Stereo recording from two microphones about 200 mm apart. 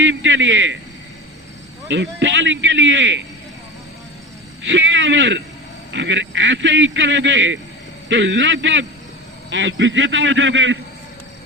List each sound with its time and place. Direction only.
0.0 s a man's voice: 70° right (ahead or behind)
1.9 s a man's voice: 65° right (ahead or behind)
4.6 s a man's voice: 70° right (ahead or behind)